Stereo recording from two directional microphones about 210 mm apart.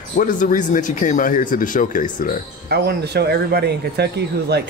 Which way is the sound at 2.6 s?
50° right (ahead or behind).